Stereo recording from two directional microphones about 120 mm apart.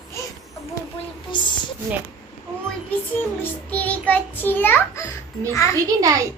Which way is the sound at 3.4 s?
15° left (ahead or behind).